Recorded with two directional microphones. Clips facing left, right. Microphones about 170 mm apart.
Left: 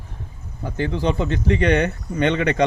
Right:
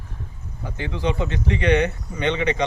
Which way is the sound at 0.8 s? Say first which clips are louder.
Left 3 dB; 35° left (ahead or behind).